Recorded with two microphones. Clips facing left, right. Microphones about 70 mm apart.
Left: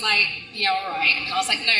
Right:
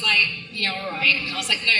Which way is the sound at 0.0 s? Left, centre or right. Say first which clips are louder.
Right 1 dB; left.